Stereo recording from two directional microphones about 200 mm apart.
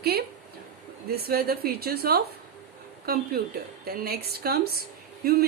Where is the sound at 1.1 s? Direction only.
50° right (ahead or behind).